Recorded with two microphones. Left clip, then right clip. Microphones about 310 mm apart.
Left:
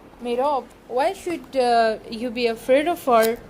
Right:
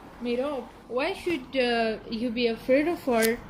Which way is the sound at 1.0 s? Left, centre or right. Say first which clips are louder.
Left 5 dB; centre.